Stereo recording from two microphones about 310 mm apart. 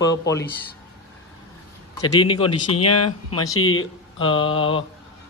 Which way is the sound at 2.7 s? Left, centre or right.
Left.